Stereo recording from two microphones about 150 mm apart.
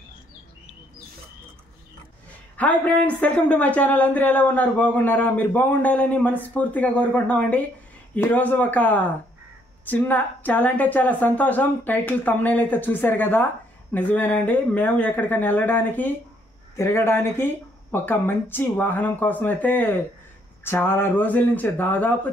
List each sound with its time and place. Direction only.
2.5 s speech: 10° left (ahead or behind)